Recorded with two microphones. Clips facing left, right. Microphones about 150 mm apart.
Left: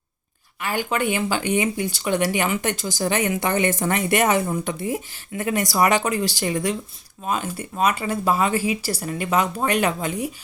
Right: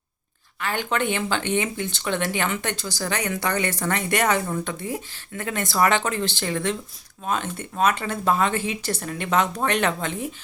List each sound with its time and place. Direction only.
0.6 s speech: 10° left (ahead or behind)